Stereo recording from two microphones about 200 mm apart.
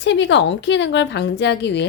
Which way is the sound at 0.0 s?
65° left (ahead or behind).